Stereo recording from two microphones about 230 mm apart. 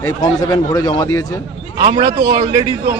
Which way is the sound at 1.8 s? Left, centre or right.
Right.